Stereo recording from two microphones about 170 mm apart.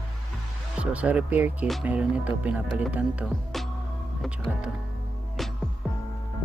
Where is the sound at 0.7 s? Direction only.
5° right (ahead or behind).